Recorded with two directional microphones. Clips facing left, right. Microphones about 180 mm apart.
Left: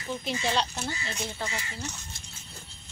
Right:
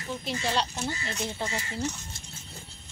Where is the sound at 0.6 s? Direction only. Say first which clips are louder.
Even; centre (ahead or behind).